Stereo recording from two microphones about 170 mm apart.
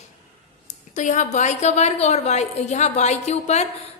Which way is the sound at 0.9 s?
45° left (ahead or behind).